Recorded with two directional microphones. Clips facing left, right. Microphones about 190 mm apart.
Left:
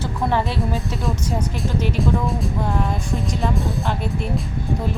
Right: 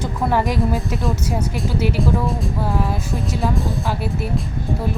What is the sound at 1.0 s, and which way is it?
Speech, centre (ahead or behind).